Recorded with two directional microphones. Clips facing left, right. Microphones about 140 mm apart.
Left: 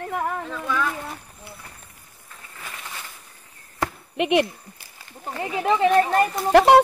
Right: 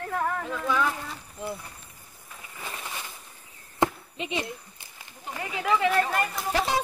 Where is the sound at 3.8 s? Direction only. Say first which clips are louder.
Right 3 dB; 20° right (ahead or behind).